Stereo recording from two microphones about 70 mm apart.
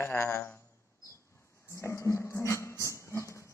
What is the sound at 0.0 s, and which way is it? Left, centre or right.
Speech, left.